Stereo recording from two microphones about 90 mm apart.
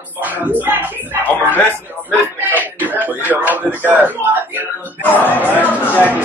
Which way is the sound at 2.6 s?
20° right (ahead or behind).